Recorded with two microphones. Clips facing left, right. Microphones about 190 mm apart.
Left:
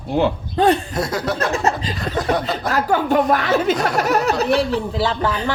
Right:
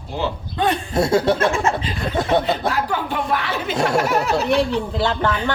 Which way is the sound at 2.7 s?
45° left (ahead or behind).